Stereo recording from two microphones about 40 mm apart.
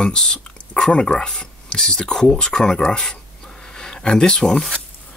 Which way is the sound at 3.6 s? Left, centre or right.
Centre.